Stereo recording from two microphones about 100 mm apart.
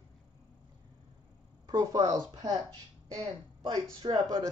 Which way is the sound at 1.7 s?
35° right (ahead or behind).